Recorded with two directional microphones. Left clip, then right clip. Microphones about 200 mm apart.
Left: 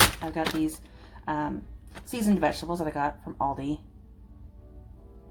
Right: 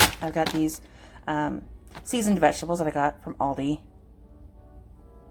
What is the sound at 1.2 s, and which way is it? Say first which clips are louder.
Speech: right 3 dB; 25° right (ahead or behind).